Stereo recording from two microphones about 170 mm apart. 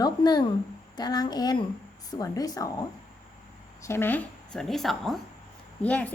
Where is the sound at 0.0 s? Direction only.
25° left (ahead or behind).